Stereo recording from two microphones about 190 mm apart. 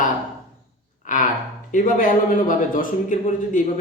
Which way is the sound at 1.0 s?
45° left (ahead or behind).